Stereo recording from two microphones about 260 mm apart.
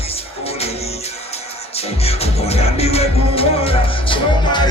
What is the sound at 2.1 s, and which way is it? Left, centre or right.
Music, left.